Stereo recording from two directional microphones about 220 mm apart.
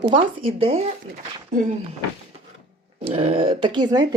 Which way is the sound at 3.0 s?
25° right (ahead or behind).